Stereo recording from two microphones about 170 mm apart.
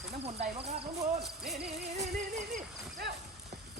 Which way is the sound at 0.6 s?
35° right (ahead or behind).